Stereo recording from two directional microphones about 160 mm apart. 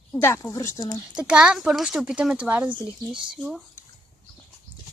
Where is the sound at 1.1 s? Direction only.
5° right (ahead or behind).